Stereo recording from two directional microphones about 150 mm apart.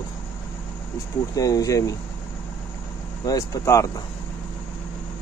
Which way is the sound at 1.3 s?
25° left (ahead or behind).